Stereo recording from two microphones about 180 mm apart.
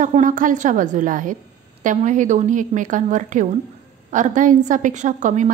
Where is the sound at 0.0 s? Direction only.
45° right (ahead or behind).